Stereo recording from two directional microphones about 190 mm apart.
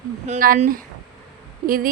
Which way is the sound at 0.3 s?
50° right (ahead or behind).